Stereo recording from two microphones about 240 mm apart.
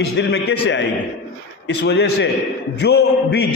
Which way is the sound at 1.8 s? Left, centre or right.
Left.